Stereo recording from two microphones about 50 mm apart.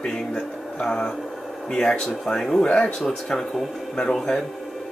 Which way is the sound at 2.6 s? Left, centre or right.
Left.